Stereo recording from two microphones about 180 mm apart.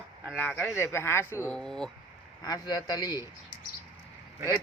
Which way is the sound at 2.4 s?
20° left (ahead or behind).